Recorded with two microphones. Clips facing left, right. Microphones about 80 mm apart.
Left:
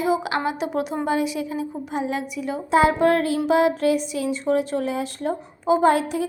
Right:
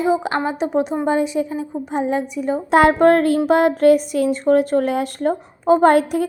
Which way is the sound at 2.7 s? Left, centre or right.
Right.